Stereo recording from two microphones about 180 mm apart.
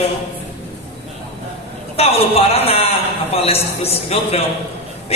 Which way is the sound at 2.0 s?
35° left (ahead or behind).